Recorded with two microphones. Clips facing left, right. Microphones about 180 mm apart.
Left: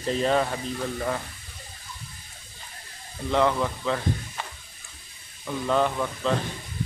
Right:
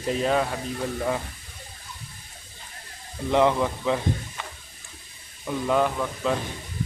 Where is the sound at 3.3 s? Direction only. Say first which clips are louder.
Right 2 dB; 15° right (ahead or behind).